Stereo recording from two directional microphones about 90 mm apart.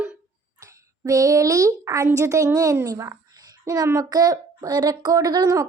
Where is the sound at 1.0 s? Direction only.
35° right (ahead or behind).